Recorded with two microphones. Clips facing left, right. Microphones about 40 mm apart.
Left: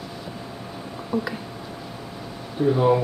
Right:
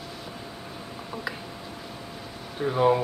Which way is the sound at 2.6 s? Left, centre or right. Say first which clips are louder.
Left 3 dB; centre.